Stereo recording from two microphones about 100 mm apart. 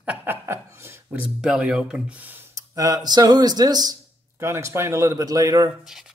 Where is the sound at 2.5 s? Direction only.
35° right (ahead or behind).